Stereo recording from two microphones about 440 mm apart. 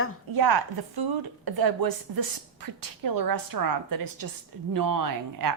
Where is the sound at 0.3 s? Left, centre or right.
Right.